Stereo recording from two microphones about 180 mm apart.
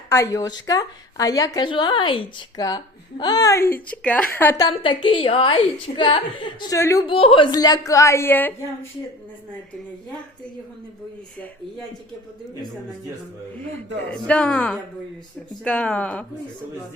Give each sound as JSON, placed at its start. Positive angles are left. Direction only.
{"t": 0.1, "sound": "a woman's voice", "side_deg": 15}
{"t": 4.7, "sound": "a woman's voice", "side_deg": 30}
{"t": 7.1, "sound": "a woman's voice", "side_deg": 30}
{"t": 13.7, "sound": "a woman's voice", "side_deg": 5}